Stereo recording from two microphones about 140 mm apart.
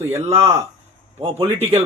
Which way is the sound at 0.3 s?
40° right (ahead or behind).